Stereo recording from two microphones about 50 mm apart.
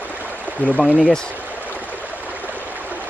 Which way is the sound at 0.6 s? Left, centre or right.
Left.